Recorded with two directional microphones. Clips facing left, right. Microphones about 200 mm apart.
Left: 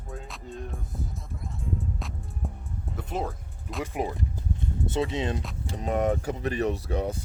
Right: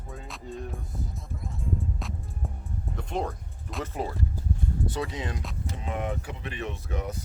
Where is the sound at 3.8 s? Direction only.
15° left (ahead or behind).